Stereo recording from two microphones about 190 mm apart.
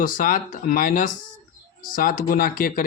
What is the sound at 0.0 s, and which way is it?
Speech, 45° left (ahead or behind).